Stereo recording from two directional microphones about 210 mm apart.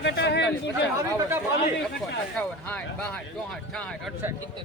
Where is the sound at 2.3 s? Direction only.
5° left (ahead or behind).